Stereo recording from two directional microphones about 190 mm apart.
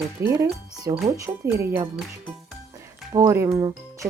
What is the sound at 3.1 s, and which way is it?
Speech, 20° right (ahead or behind).